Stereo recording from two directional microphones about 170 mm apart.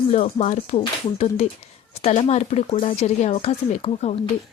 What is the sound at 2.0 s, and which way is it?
Speech, 35° left (ahead or behind).